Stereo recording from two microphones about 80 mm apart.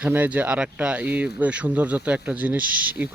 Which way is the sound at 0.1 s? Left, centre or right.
Right.